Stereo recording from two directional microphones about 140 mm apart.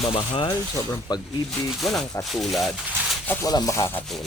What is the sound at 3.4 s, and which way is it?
Speech, 25° left (ahead or behind).